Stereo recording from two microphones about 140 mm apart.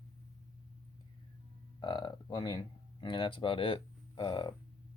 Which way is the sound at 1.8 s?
30° left (ahead or behind).